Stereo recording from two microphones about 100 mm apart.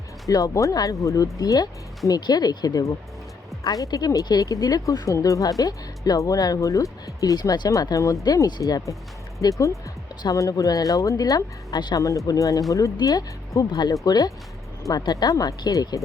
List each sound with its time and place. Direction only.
0.3 s speech: 35° left (ahead or behind)
11.9 s speech: 35° left (ahead or behind)